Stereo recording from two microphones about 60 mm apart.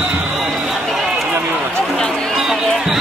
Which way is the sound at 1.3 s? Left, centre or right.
Right.